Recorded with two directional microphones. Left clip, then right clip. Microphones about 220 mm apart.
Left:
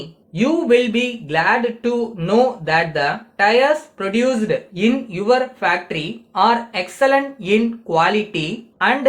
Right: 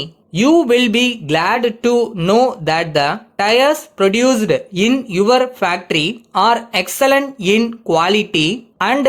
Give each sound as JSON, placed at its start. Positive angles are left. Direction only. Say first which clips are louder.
{"t": 0.3, "sound": "speech", "louder": "right 3 dB", "side_deg": -45}